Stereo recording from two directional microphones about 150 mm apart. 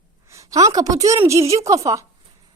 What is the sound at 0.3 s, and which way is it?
A woman's voice, 20° right (ahead or behind).